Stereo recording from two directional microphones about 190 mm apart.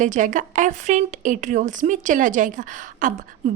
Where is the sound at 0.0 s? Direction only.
40° right (ahead or behind).